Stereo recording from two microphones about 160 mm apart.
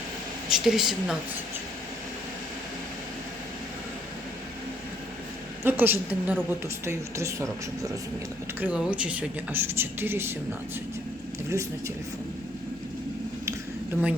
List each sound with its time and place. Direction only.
0.4 s speech: 5° right (ahead or behind)
5.6 s a woman's voice: 15° right (ahead or behind)
8.6 s a woman's voice: 5° right (ahead or behind)
13.9 s a woman's voice: 10° right (ahead or behind)